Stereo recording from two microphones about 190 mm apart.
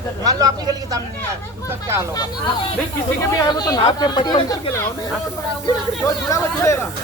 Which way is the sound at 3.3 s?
20° left (ahead or behind).